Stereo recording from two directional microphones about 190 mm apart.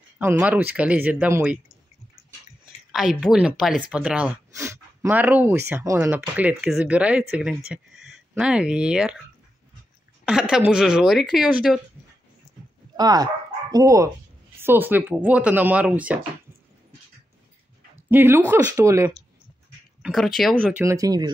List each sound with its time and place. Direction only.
0.2 s speech: 10° right (ahead or behind)
2.9 s speech: centre (ahead or behind)
10.5 s speech: 5° right (ahead or behind)
12.9 s speech: 20° right (ahead or behind)
18.1 s speech: 10° right (ahead or behind)
20.0 s speech: centre (ahead or behind)
20.7 s speech: 15° right (ahead or behind)